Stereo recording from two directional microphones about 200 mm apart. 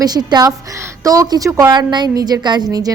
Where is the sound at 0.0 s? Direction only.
20° right (ahead or behind).